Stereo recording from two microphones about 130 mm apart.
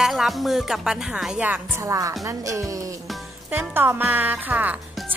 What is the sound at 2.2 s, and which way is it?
Music, 25° right (ahead or behind).